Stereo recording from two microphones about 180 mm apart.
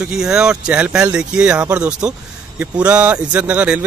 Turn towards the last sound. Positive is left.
turn(degrees=-10)  # may be behind; listen again after turning